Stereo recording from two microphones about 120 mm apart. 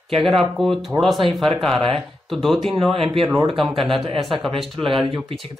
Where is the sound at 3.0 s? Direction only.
45° right (ahead or behind).